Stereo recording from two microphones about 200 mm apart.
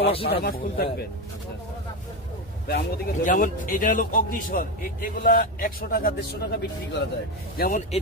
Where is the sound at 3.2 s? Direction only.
40° left (ahead or behind).